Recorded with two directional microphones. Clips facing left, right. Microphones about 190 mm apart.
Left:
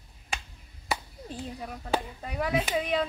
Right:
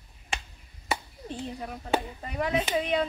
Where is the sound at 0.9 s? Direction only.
Centre (ahead or behind).